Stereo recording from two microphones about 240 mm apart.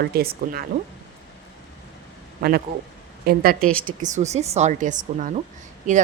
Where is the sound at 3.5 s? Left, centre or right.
Centre.